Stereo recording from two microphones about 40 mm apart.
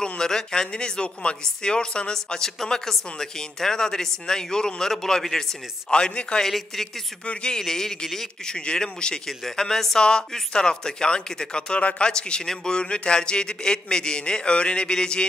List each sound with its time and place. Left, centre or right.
0.0 s speech: centre
5.9 s a man's voice: left
8.5 s a man's voice: centre